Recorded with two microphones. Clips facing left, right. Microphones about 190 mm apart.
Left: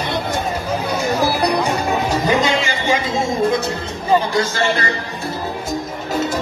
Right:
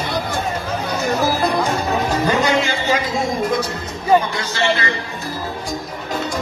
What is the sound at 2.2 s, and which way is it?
Music, 15° left (ahead or behind).